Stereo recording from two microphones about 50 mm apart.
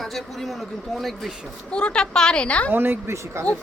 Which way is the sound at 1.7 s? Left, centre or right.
Centre.